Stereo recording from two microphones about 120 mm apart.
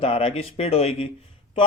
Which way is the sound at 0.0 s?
50° left (ahead or behind).